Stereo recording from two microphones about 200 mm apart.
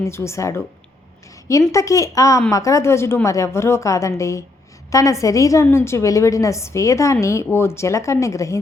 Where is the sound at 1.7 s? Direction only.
15° left (ahead or behind).